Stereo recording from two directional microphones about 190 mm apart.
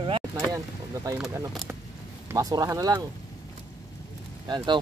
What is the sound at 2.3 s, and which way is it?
Speech, 20° right (ahead or behind).